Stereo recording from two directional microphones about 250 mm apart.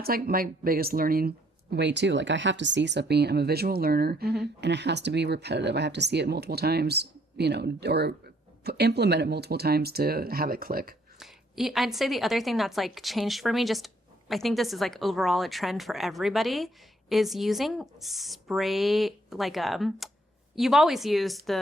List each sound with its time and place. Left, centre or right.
0.0 s speech: right
11.2 s a woman's voice: centre